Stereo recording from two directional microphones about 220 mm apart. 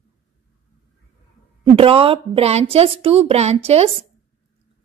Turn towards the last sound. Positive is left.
turn(degrees=-25)  # may be behind; listen again after turning